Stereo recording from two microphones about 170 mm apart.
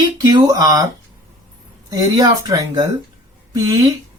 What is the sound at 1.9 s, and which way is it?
Speech, 20° right (ahead or behind).